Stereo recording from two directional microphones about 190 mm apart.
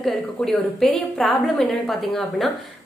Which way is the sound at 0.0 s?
Centre (ahead or behind).